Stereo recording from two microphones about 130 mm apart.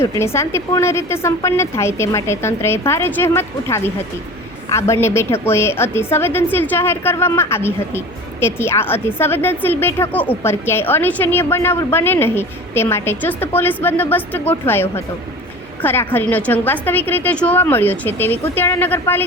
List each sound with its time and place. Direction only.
0.0 s a woman's voice: 20° left (ahead or behind)